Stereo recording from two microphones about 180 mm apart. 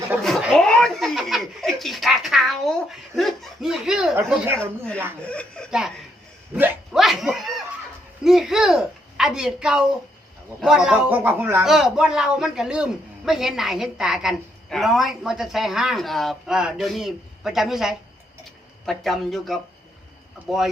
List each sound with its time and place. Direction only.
0.2 s chuckle: centre (ahead or behind)
5.2 s snicker: 5° left (ahead or behind)
6.6 s dog: 5° right (ahead or behind)
8.2 s a sound: centre (ahead or behind)
10.6 s a man's voice: 5° right (ahead or behind)